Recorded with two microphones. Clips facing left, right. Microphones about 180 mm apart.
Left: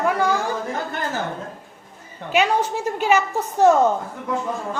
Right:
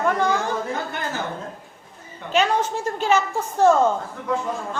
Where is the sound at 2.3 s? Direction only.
10° left (ahead or behind).